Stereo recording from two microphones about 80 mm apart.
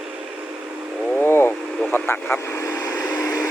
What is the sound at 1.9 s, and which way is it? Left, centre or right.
Vehicle, left.